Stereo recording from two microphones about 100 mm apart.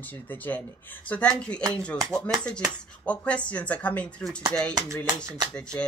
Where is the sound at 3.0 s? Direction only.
15° left (ahead or behind).